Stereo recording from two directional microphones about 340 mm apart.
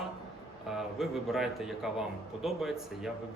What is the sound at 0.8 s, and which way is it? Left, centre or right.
A man's voice, centre.